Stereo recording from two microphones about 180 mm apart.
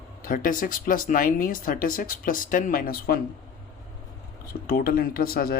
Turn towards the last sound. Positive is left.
turn(degrees=55)  # may be behind; listen again after turning